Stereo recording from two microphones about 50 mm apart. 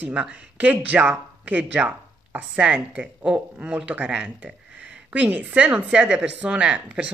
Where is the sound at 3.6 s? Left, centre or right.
Right.